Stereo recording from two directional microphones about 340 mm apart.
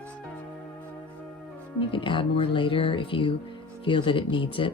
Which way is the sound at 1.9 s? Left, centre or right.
Centre.